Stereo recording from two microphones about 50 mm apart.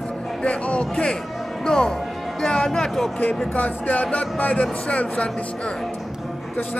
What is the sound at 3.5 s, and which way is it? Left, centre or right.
Speech, left.